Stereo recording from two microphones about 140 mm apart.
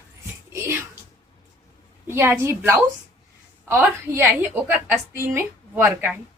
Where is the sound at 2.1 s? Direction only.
15° right (ahead or behind).